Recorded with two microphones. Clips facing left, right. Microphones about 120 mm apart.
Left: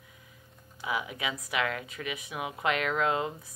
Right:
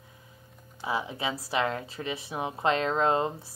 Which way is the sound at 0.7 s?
30° right (ahead or behind).